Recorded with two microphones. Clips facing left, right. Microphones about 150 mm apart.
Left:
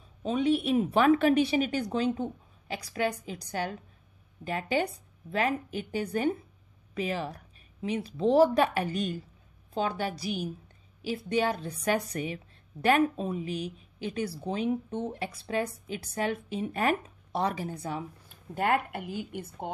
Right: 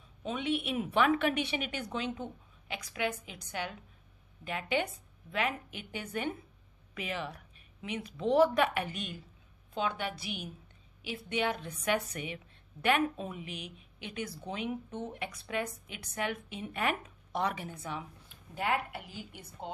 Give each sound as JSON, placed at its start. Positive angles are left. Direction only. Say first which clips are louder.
{"t": 0.2, "sound": "a woman's voice", "louder": "left 7 dB", "side_deg": 35}
{"t": 18.5, "sound": "a woman's voice", "louder": "left 5 dB", "side_deg": 50}